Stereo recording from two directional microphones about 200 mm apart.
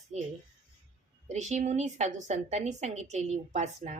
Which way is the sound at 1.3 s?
35° right (ahead or behind).